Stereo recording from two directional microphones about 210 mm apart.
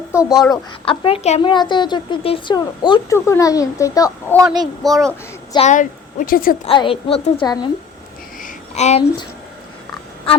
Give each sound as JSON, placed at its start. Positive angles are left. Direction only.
{"t": 0.1, "sound": "a sound", "side_deg": -5}
{"t": 0.5, "sound": "a woman's voice", "side_deg": 25}
{"t": 4.6, "sound": "speech", "side_deg": 0}
{"t": 5.5, "sound": "a woman's voice", "side_deg": 35}
{"t": 6.7, "sound": "a woman's voice", "side_deg": 25}
{"t": 8.4, "sound": "a sound", "side_deg": 35}